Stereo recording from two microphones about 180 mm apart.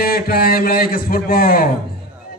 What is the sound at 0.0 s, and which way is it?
A man's voice, 60° left (ahead or behind).